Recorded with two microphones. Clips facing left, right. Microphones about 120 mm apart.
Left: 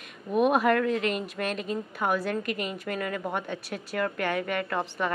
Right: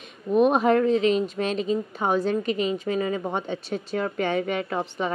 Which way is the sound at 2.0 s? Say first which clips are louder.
Right 2 dB; 25° right (ahead or behind).